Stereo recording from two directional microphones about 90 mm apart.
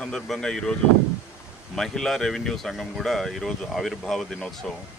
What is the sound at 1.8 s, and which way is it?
Speech, 5° left (ahead or behind).